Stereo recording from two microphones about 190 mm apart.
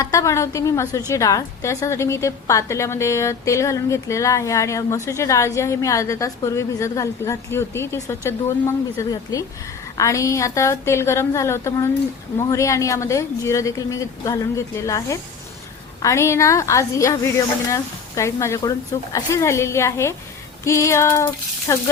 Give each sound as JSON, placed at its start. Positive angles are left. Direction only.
{"t": 0.0, "sound": "a woman's voice", "side_deg": 15}